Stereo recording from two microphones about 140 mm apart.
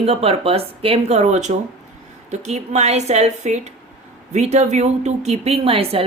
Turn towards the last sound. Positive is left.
turn(degrees=-45)  # may be behind; listen again after turning